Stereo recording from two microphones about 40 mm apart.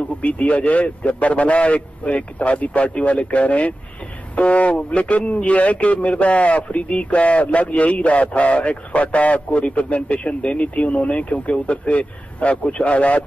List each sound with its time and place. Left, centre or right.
0.2 s a man's voice: left